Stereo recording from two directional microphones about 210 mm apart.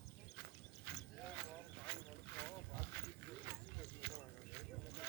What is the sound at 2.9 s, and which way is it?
Pig, 50° right (ahead or behind).